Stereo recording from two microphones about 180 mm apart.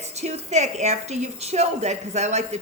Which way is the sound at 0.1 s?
40° right (ahead or behind).